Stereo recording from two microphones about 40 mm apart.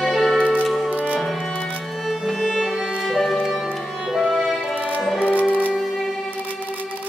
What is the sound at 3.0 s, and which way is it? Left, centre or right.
Music, centre.